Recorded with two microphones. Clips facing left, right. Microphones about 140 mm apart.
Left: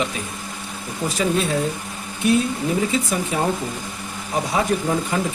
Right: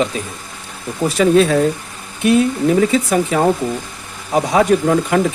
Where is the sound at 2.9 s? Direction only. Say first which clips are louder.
Right 7 dB; 70° right (ahead or behind).